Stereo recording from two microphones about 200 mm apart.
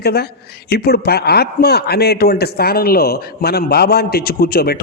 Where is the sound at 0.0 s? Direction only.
50° left (ahead or behind).